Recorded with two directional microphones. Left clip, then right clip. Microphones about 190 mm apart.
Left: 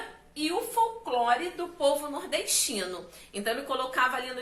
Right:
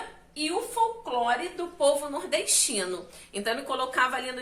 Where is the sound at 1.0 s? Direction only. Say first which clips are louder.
Left 1 dB; 15° right (ahead or behind).